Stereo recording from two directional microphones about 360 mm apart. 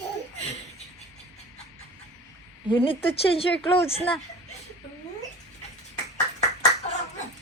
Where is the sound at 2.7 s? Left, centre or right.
Centre.